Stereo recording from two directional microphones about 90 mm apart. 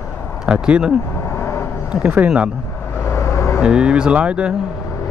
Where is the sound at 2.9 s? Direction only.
30° left (ahead or behind).